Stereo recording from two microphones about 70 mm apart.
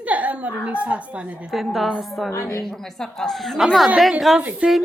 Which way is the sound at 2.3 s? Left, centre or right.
Left.